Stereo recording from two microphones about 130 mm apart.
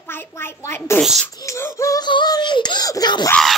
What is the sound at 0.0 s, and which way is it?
A child's voice, 20° left (ahead or behind).